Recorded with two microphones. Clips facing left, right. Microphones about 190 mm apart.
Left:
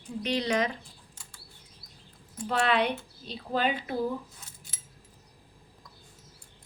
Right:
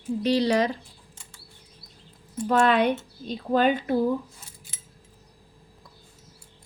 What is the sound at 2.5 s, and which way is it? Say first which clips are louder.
Speech: right 6 dB; 45° right (ahead or behind).